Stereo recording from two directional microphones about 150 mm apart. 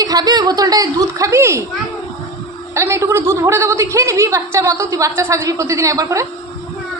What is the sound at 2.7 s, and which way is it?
A woman's voice, 20° right (ahead or behind).